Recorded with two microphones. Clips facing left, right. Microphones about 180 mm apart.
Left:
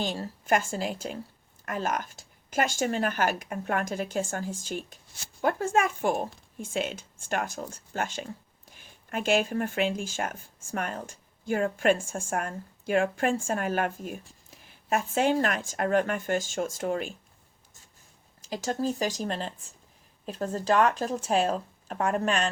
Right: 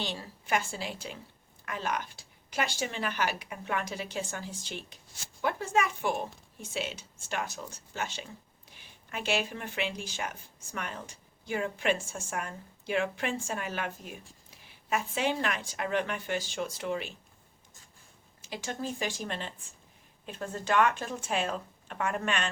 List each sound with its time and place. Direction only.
0.0 s speech: 45° left (ahead or behind)
18.5 s speech: 40° left (ahead or behind)